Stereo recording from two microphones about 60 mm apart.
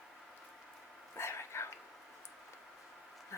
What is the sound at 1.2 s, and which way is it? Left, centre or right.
Dog, left.